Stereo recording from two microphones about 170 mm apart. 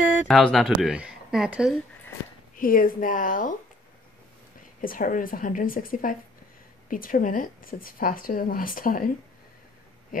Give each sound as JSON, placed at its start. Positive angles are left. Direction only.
{"t": 0.3, "sound": "speech", "side_deg": 0}
{"t": 2.5, "sound": "speech", "side_deg": 55}
{"t": 4.8, "sound": "a woman's voice", "side_deg": 55}